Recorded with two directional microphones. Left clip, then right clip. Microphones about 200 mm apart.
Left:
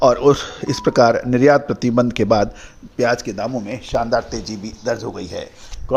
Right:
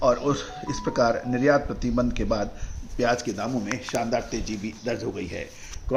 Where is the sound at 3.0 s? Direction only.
35° left (ahead or behind); by 5.3 s 15° left (ahead or behind).